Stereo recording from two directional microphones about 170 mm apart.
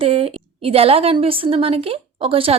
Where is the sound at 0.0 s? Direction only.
35° right (ahead or behind).